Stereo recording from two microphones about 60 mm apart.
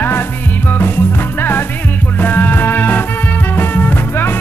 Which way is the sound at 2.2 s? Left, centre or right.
Left.